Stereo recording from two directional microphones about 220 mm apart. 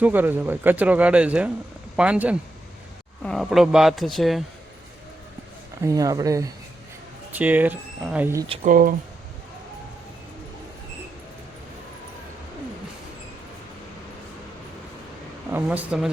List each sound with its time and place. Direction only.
0.0 s speech: 10° right (ahead or behind)
5.8 s speech: 15° right (ahead or behind)
8.4 s speech: 35° right (ahead or behind)
15.4 s speech: 10° right (ahead or behind)